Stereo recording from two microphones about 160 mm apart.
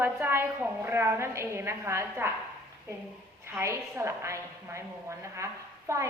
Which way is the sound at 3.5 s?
15° right (ahead or behind).